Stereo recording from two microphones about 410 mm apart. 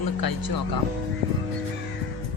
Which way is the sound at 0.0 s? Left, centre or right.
Left.